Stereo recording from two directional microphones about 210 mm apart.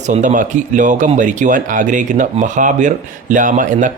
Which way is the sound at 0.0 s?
35° right (ahead or behind).